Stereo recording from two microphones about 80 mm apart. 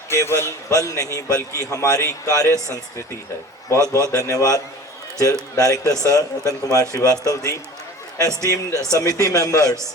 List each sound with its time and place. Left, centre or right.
0.1 s a man's voice: left
0.7 s a man's voice: left
3.9 s a man's voice: left